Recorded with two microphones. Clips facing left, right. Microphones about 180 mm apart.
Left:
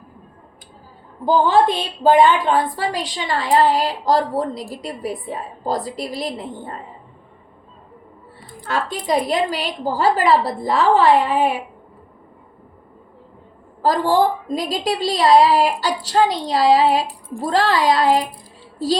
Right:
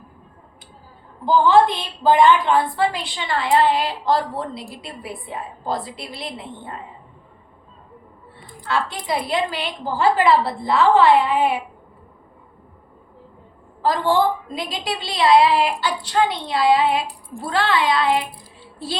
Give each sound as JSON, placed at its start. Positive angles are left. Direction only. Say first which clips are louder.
{"t": 1.2, "sound": "a woman's voice", "louder": "even", "side_deg": 40}
{"t": 8.4, "sound": "a woman's voice", "louder": "even", "side_deg": 40}
{"t": 13.8, "sound": "a woman's voice", "louder": "left 2 dB", "side_deg": 40}